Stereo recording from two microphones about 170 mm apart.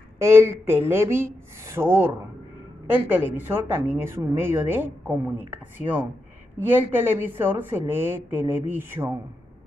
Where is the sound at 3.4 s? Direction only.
10° right (ahead or behind).